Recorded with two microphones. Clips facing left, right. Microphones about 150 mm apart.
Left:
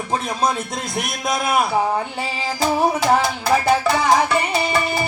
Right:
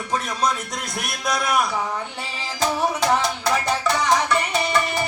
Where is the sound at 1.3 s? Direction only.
25° left (ahead or behind).